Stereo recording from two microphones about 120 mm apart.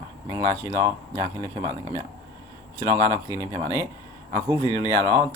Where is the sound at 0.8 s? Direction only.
30° right (ahead or behind).